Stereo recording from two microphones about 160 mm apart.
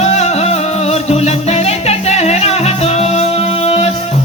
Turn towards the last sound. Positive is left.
turn(degrees=40)  # may be behind; listen again after turning